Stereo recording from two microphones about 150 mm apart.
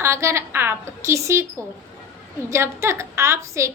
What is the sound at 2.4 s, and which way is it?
A woman's voice, 20° right (ahead or behind).